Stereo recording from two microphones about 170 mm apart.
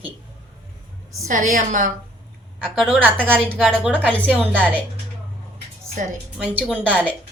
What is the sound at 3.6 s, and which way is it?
Speech, 5° left (ahead or behind).